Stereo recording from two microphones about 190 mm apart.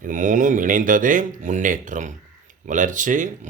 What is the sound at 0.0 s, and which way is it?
Speech, 45° right (ahead or behind).